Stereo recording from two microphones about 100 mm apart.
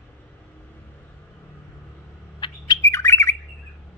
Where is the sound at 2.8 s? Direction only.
25° left (ahead or behind).